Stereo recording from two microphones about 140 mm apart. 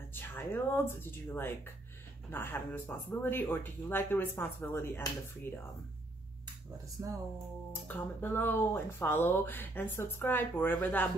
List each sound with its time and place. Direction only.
0.1 s speech: 15° left (ahead or behind)
7.0 s speech: 25° right (ahead or behind)
7.9 s speech: 15° left (ahead or behind)